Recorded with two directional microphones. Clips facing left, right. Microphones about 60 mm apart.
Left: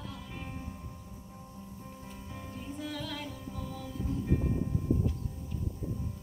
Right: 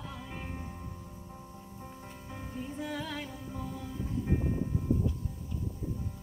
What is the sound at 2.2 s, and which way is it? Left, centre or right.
Music, centre.